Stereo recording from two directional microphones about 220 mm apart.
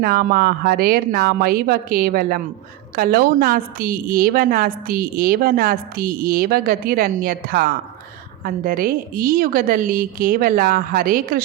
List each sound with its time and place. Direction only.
0.0 s a woman's voice: 40° right (ahead or behind)